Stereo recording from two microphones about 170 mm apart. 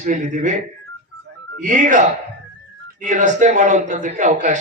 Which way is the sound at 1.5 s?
50° right (ahead or behind).